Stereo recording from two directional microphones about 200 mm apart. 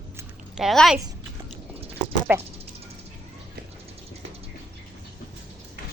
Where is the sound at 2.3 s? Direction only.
10° right (ahead or behind).